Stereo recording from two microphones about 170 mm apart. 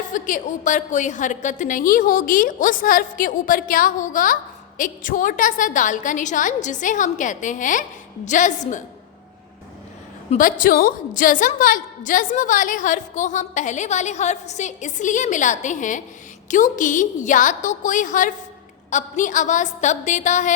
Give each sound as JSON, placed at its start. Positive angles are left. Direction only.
{"t": 0.1, "sound": "a woman's voice", "side_deg": 50}
{"t": 10.3, "sound": "a woman's voice", "side_deg": 55}